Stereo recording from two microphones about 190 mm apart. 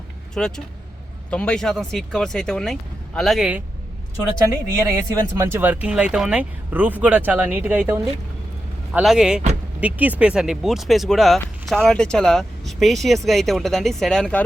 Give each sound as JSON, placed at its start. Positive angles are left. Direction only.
{"t": 0.3, "sound": "speech", "side_deg": 5}
{"t": 4.4, "sound": "speech", "side_deg": -15}